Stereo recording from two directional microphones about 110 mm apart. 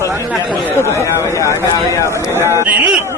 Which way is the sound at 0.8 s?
25° left (ahead or behind).